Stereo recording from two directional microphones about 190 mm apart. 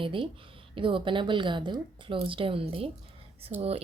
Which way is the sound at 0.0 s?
25° right (ahead or behind).